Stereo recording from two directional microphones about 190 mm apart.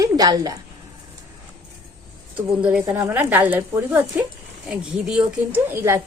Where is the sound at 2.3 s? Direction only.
5° right (ahead or behind).